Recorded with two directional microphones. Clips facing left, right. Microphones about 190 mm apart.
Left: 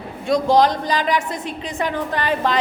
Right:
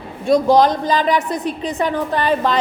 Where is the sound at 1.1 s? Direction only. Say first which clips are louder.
Right 4 dB; 20° right (ahead or behind).